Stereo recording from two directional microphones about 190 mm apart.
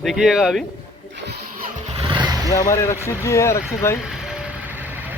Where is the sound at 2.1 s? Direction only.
25° right (ahead or behind).